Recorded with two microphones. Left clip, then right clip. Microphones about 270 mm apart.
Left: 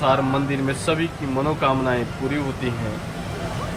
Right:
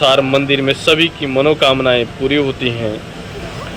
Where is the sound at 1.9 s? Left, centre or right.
Centre.